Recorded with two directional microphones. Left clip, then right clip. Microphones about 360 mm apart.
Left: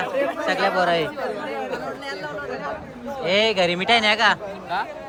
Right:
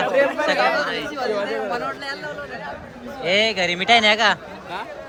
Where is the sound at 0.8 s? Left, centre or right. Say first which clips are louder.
Left 5 dB; centre.